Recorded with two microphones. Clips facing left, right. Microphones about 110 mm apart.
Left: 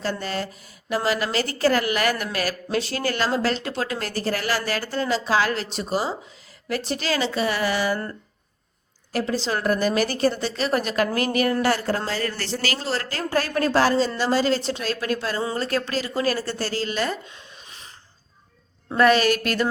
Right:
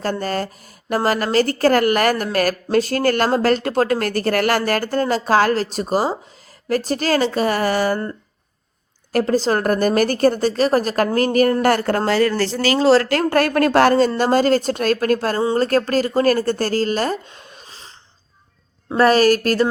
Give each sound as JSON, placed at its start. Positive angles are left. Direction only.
{"t": 0.0, "sound": "speech", "side_deg": -45}
{"t": 9.1, "sound": "speech", "side_deg": -45}
{"t": 11.6, "sound": "speech", "side_deg": -55}
{"t": 12.8, "sound": "speech", "side_deg": -90}
{"t": 18.9, "sound": "a woman's voice", "side_deg": -40}